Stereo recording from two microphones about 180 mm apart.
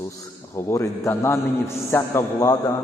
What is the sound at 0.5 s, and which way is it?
A man's voice, 15° left (ahead or behind).